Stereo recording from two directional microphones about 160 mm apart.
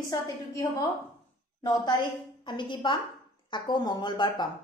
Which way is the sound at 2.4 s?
30° left (ahead or behind).